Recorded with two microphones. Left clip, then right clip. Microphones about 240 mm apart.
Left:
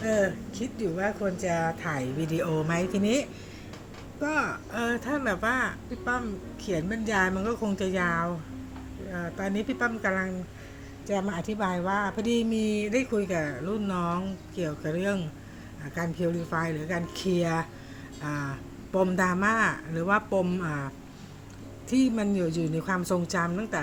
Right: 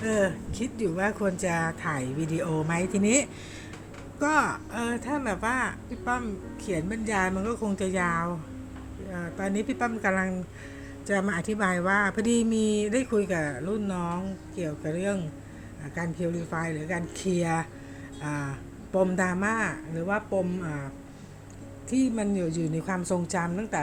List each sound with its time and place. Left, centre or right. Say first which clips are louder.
0.0 s a woman's voice: even; centre
4.7 s a woman's voice: left 1 dB; centre
21.8 s speech: left 1 dB; centre